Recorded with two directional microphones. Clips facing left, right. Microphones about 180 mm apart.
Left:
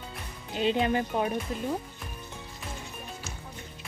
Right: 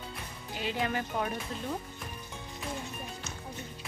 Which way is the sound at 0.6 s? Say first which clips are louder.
Left 7 dB; 20° left (ahead or behind).